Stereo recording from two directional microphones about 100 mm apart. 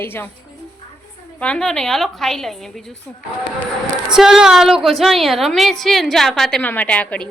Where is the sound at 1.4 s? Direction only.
10° left (ahead or behind).